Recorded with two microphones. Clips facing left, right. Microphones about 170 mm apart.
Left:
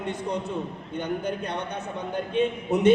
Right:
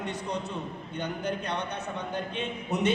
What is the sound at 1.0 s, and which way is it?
A man's voice, 55° left (ahead or behind).